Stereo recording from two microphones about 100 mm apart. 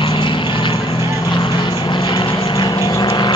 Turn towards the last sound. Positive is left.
turn(degrees=50)  # may be behind; listen again after turning